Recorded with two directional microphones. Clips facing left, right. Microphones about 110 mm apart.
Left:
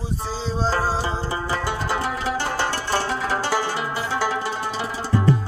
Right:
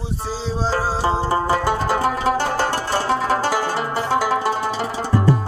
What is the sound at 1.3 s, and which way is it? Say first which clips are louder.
Music: right 7 dB; 45° right (ahead or behind).